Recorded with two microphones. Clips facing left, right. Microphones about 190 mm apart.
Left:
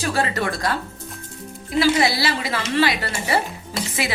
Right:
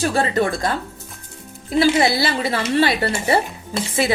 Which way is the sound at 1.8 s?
25° right (ahead or behind).